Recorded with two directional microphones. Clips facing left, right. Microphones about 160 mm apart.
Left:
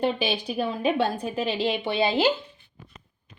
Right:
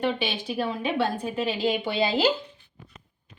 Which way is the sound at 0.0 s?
40° left (ahead or behind).